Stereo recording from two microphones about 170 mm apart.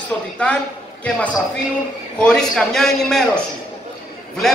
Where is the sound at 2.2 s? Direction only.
5° left (ahead or behind).